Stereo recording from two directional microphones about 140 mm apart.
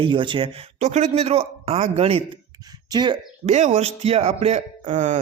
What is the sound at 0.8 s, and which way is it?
Speech, 55° right (ahead or behind).